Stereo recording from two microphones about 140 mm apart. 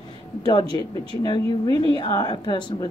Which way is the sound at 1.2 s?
30° left (ahead or behind).